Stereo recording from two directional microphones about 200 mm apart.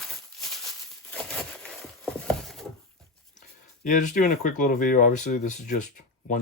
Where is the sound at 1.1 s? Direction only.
5° left (ahead or behind).